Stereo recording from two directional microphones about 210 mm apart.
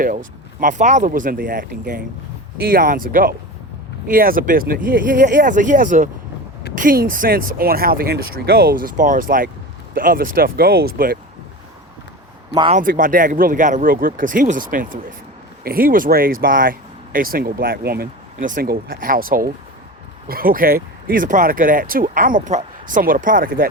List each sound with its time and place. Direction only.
0.6 s speech: 35° right (ahead or behind)
12.7 s speech: 40° right (ahead or behind)